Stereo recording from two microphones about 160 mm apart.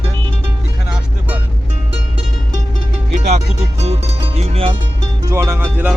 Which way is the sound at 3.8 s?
40° right (ahead or behind).